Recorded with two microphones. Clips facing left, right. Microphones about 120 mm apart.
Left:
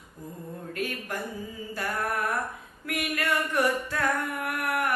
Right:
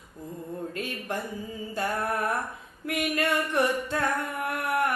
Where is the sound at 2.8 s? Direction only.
25° right (ahead or behind).